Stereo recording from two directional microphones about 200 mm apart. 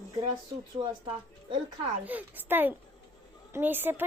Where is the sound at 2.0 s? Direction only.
10° right (ahead or behind).